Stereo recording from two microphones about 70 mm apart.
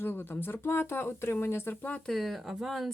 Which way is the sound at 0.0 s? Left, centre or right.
Left.